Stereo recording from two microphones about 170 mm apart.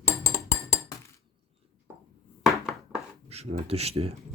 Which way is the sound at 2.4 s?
Centre (ahead or behind).